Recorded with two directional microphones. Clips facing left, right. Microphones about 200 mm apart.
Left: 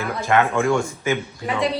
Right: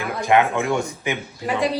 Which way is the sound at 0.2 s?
15° right (ahead or behind).